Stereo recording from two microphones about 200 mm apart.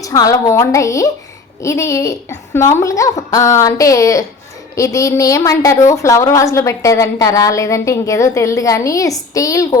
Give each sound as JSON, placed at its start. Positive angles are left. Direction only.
{"t": 0.0, "sound": "a woman's voice", "side_deg": 15}